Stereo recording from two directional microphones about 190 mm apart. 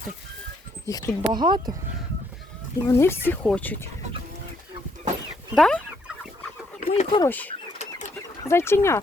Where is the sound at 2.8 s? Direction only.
10° left (ahead or behind).